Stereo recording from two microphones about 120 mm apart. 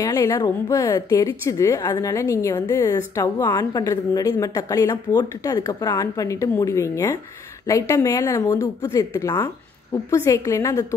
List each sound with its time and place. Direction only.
0.0 s a woman's voice: 30° left (ahead or behind)